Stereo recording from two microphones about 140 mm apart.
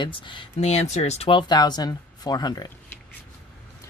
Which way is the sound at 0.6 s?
50° left (ahead or behind).